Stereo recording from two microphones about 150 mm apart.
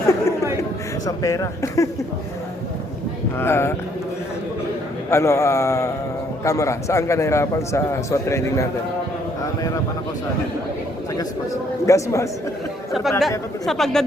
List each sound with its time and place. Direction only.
1.0 s a man's voice: 20° left (ahead or behind)
3.3 s speech: 15° left (ahead or behind)
5.1 s a man's voice: 20° left (ahead or behind)
11.9 s a man's voice: 20° left (ahead or behind)
12.9 s speech: centre (ahead or behind)